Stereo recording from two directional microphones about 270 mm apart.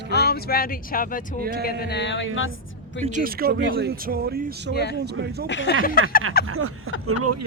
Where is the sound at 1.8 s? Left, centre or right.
Left.